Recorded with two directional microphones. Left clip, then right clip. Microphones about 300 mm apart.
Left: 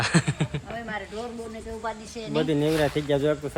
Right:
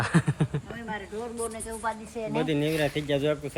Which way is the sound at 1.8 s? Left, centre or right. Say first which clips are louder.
Right 3 dB; right.